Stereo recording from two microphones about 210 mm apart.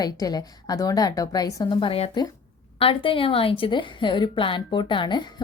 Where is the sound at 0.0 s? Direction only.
20° left (ahead or behind).